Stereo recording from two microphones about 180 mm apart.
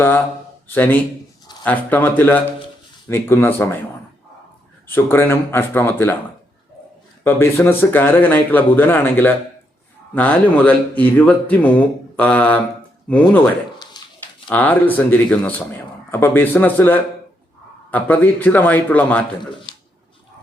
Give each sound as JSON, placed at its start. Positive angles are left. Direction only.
{"t": 0.7, "sound": "speech", "side_deg": 10}
{"t": 4.9, "sound": "speech", "side_deg": 10}
{"t": 7.3, "sound": "speech", "side_deg": 15}
{"t": 14.0, "sound": "a sound", "side_deg": 25}
{"t": 14.5, "sound": "speech", "side_deg": 10}
{"t": 19.7, "sound": "a sound", "side_deg": 25}